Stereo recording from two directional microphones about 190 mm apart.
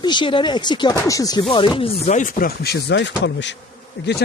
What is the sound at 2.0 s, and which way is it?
Speech, 40° left (ahead or behind).